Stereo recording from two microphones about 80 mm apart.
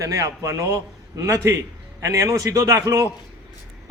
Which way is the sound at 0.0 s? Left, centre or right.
Right.